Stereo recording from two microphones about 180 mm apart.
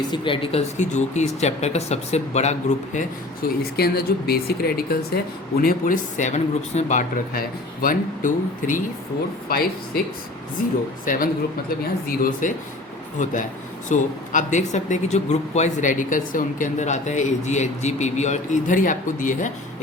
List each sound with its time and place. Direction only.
0.1 s speech: 30° left (ahead or behind)
3.6 s speech: 60° left (ahead or behind)
9.5 s speech: 60° left (ahead or behind)
11.0 s speech: 50° left (ahead or behind)